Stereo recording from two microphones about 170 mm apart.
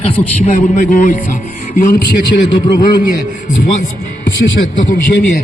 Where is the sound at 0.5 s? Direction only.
50° left (ahead or behind).